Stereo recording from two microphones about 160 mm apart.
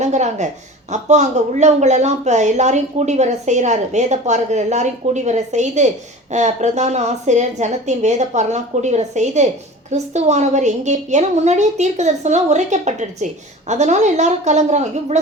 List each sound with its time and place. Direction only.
0.0 s a woman's voice: 45° right (ahead or behind)